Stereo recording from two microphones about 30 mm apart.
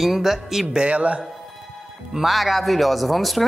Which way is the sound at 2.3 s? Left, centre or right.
Centre.